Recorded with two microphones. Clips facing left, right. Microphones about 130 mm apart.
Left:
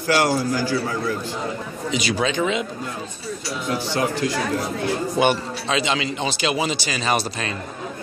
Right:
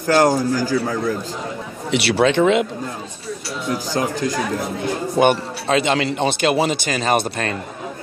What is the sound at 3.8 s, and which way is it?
A man's voice, 40° right (ahead or behind).